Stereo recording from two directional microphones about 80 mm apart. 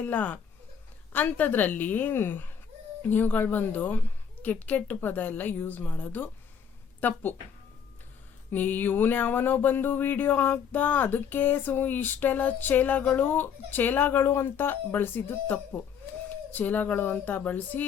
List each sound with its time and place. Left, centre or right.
0.0 s speech: centre
8.5 s speech: left
16.6 s speech: left